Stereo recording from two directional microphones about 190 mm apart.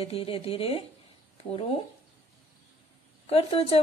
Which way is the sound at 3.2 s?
30° left (ahead or behind).